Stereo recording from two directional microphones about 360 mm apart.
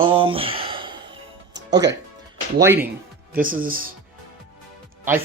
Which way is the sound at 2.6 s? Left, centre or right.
Centre.